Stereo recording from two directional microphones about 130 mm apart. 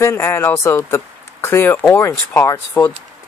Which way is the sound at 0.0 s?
20° left (ahead or behind).